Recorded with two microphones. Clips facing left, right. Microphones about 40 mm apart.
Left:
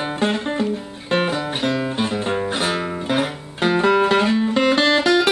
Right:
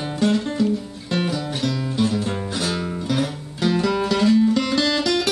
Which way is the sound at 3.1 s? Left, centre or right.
Left.